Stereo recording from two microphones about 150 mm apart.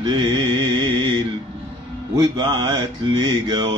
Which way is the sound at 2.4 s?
30° right (ahead or behind).